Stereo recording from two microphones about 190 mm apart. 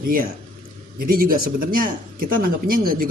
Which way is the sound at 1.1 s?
50° right (ahead or behind).